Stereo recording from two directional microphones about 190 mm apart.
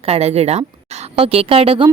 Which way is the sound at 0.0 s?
30° right (ahead or behind).